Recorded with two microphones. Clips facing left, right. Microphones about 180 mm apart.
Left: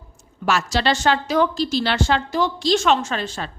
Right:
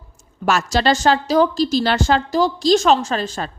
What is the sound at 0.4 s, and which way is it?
A woman's voice, 45° right (ahead or behind).